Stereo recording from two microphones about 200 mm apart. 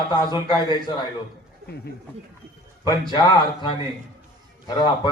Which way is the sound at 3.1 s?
20° left (ahead or behind).